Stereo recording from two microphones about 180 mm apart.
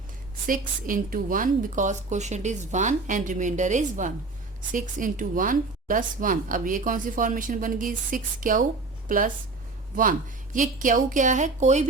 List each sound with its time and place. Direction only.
0.4 s a woman's voice: 50° right (ahead or behind)